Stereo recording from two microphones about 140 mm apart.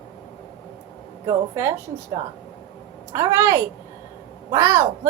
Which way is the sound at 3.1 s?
25° right (ahead or behind).